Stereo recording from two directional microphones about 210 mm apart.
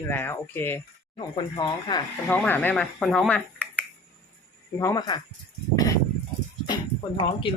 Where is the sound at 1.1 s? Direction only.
20° left (ahead or behind).